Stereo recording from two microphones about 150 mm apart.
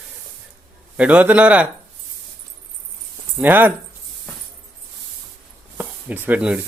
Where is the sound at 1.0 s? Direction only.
10° right (ahead or behind).